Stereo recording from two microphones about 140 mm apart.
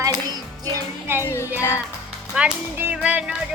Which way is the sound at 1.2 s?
20° left (ahead or behind).